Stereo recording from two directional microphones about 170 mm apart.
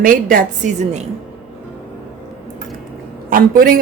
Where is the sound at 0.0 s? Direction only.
55° right (ahead or behind).